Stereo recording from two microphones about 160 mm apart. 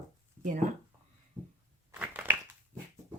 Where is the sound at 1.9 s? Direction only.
10° right (ahead or behind).